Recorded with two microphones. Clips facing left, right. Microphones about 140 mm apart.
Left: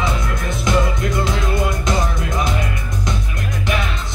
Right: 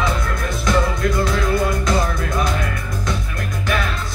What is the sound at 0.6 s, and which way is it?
Music, 20° left (ahead or behind).